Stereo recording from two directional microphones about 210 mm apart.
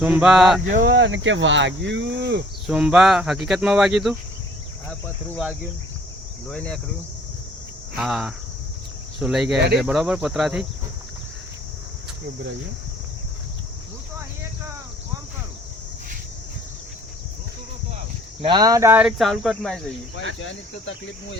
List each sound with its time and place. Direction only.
0.0 s speech: 5° right (ahead or behind)
0.7 s speech: 40° right (ahead or behind)
0.9 s speech: 60° right (ahead or behind)
2.6 s speech: 5° right (ahead or behind)
6.5 s speech: 5° left (ahead or behind)
7.9 s speech: centre (ahead or behind)
18.4 s speech: 20° right (ahead or behind); by 19.8 s centre (ahead or behind)
20.4 s speech: 60° left (ahead or behind)